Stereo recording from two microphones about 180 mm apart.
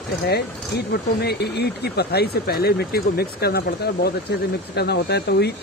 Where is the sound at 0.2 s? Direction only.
65° left (ahead or behind).